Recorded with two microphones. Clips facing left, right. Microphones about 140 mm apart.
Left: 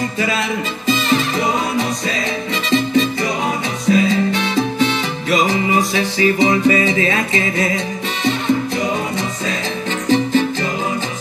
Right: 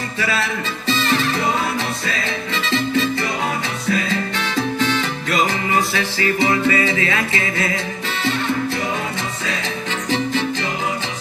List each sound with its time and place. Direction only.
3.9 s music: 15° left (ahead or behind)